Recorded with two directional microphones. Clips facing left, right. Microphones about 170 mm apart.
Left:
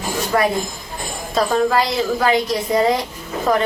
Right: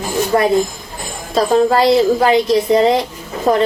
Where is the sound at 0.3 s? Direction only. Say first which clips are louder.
Right 5 dB; 25° right (ahead or behind).